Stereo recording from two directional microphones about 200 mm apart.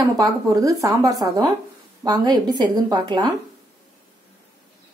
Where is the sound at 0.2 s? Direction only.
15° right (ahead or behind).